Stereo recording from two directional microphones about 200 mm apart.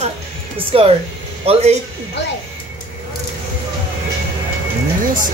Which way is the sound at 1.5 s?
30° right (ahead or behind).